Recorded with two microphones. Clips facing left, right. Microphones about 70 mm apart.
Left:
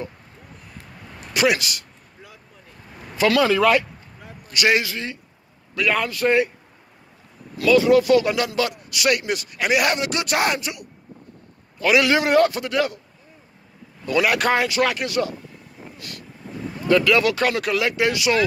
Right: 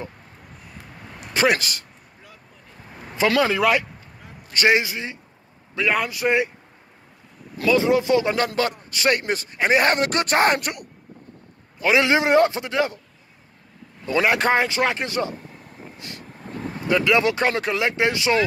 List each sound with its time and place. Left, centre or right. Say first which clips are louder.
1.3 s speech: even; right
3.2 s speech: left 2 dB; right
4.5 s speech: right 1 dB; right
4.7 s speech: even; right
7.5 s a man's voice: left 3 dB; right
11.8 s speech: left 1 dB; right
14.0 s speech: even; right
16.0 s vehicle: even; right
16.8 s speech: left 2 dB; right